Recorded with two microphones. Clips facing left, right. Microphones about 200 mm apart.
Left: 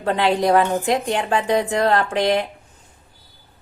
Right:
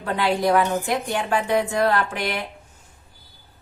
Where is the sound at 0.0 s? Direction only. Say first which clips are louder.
Left 3 dB; 20° left (ahead or behind).